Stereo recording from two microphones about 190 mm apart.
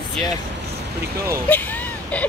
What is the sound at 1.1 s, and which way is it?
Speech, 15° right (ahead or behind).